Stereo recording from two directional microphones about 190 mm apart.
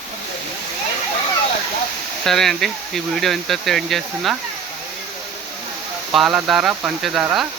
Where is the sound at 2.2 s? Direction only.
Centre (ahead or behind).